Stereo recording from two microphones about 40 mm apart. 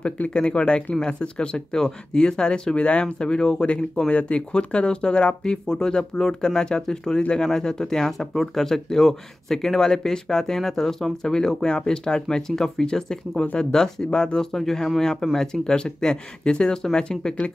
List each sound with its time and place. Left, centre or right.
0.3 s speech: left
3.2 s speech: centre